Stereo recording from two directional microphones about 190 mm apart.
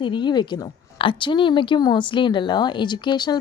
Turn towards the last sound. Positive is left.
turn(degrees=25)  # may be behind; listen again after turning